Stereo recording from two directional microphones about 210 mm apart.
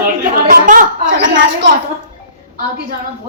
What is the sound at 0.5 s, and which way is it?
Speech, 40° right (ahead or behind).